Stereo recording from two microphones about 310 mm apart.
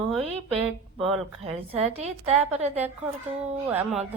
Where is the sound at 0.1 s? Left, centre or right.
Centre.